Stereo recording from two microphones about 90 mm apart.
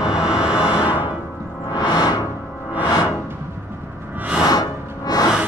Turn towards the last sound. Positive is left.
turn(degrees=45)  # may be behind; listen again after turning